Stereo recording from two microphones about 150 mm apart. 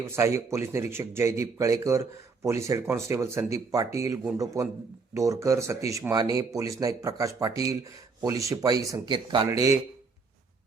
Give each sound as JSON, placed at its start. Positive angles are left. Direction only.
{"t": 0.0, "sound": "speech", "side_deg": -20}